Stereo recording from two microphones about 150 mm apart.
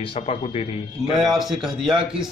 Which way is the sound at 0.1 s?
35° left (ahead or behind).